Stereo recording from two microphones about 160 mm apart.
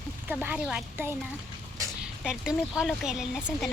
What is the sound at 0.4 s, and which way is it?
Speech, 5° right (ahead or behind).